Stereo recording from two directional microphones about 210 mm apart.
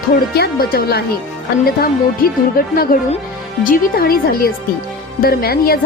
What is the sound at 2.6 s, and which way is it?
Music, 45° left (ahead or behind).